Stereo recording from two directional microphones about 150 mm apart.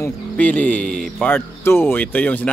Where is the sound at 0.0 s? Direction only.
10° left (ahead or behind).